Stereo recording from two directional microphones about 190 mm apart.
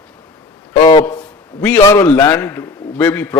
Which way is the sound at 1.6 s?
10° left (ahead or behind).